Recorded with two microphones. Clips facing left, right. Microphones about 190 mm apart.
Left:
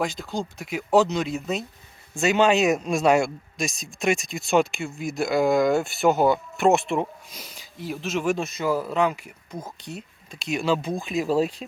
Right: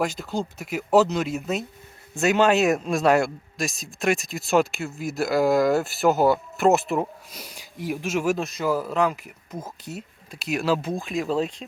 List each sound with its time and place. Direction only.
0.0 s speech: 5° right (ahead or behind)